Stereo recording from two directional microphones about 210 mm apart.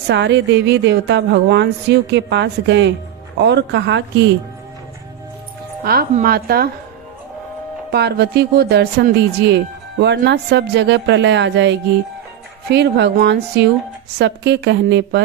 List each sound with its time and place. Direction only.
0.1 s speech: 55° right (ahead or behind)
5.8 s speech: 45° right (ahead or behind)
7.9 s speech: 50° right (ahead or behind)